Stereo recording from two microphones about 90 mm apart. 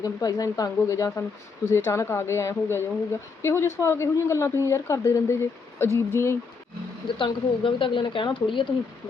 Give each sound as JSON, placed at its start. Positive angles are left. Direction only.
{"t": 0.0, "sound": "a woman's voice", "side_deg": 45}
{"t": 7.2, "sound": "a woman's voice", "side_deg": 70}